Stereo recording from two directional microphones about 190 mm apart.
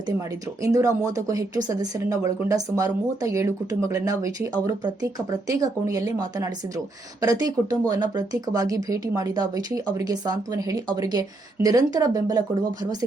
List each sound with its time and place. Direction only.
0.6 s speech: 15° right (ahead or behind)